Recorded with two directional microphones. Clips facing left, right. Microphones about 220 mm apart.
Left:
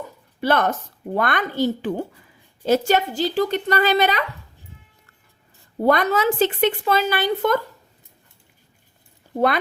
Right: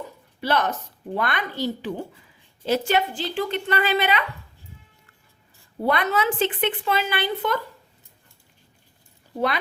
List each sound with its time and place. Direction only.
0.4 s a woman's voice: 50° left (ahead or behind)
5.8 s a woman's voice: 40° left (ahead or behind)